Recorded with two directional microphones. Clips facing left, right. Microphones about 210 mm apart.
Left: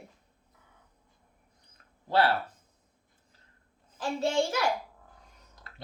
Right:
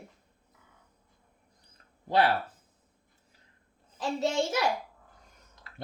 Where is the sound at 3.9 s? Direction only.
20° right (ahead or behind).